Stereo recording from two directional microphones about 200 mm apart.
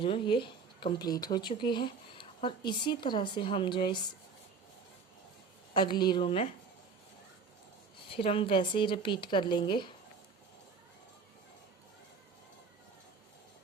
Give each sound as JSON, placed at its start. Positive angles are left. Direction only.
{"t": 0.0, "sound": "speech", "side_deg": 25}
{"t": 5.7, "sound": "speech", "side_deg": 25}
{"t": 8.1, "sound": "speech", "side_deg": 25}